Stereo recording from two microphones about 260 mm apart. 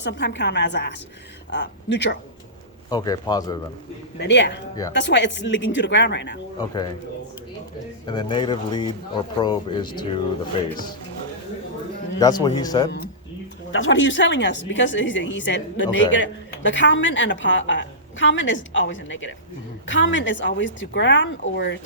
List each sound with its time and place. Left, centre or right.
0.0 s a woman's voice: left
2.9 s speech: centre
4.2 s speech: left
6.6 s speech: centre
8.0 s speech: centre
12.2 s speech: centre
13.7 s speech: left